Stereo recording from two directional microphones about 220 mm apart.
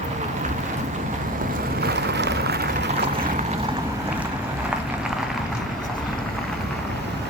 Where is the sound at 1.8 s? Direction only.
50° right (ahead or behind).